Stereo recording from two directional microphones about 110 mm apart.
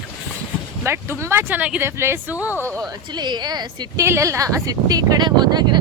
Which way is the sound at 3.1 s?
40° right (ahead or behind).